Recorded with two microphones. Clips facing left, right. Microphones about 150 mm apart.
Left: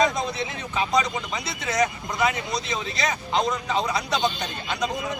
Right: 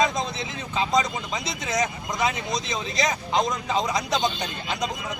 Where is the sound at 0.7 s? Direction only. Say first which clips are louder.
Right 1 dB; 25° right (ahead or behind).